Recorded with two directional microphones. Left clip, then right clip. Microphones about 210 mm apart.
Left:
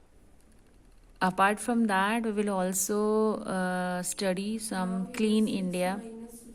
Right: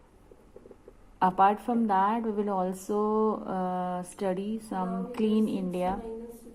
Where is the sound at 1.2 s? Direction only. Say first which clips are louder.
Right 3 dB; 20° left (ahead or behind).